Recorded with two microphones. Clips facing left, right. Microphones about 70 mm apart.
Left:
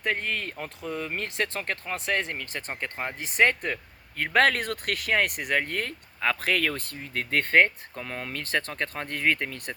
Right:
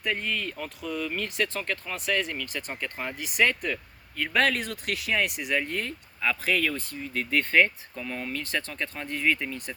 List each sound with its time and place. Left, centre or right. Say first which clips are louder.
0.0 s speech: left 1 dB; left